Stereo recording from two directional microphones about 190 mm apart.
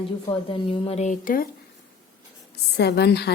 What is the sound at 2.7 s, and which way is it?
Speech, 60° left (ahead or behind).